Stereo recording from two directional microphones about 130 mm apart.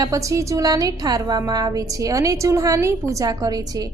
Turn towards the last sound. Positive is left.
turn(degrees=-30)  # may be behind; listen again after turning